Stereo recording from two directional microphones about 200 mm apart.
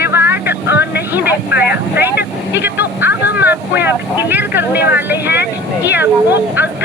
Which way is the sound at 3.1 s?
55° left (ahead or behind).